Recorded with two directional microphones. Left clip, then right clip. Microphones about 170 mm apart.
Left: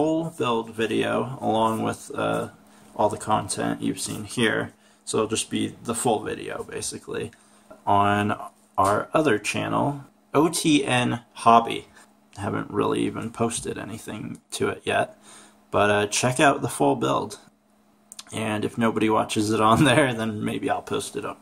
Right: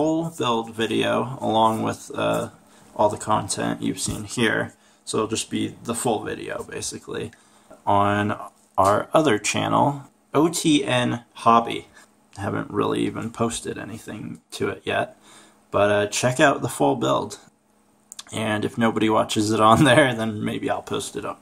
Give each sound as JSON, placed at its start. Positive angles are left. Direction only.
{"t": 0.0, "sound": "speech", "side_deg": -5}
{"t": 8.8, "sound": "speech", "side_deg": -15}
{"t": 10.3, "sound": "speech", "side_deg": 0}